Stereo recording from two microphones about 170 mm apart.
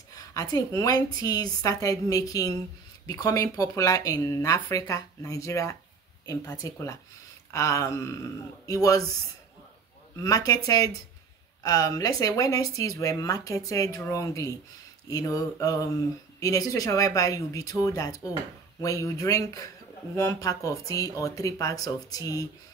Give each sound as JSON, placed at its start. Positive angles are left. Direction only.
{"t": 0.1, "sound": "speech", "side_deg": 20}
{"t": 10.1, "sound": "speech", "side_deg": 20}
{"t": 11.6, "sound": "speech", "side_deg": 20}